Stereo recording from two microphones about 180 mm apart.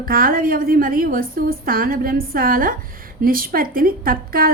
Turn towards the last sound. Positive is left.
turn(degrees=-55)  # may be behind; listen again after turning